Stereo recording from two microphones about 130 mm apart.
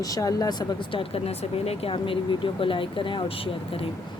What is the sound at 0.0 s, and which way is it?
Speech, 25° left (ahead or behind).